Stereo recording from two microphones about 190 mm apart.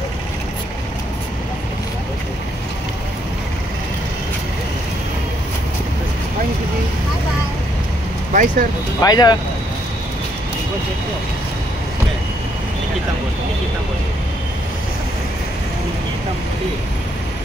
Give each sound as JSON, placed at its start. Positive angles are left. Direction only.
{"t": 8.3, "sound": "speech", "side_deg": -45}
{"t": 9.0, "sound": "speech", "side_deg": 20}